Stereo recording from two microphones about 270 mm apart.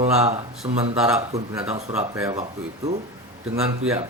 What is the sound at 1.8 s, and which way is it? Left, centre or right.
Speech, right.